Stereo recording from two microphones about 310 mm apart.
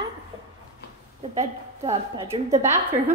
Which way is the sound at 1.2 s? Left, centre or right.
Centre.